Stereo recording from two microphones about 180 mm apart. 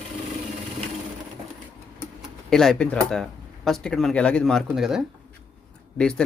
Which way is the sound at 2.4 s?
5° left (ahead or behind).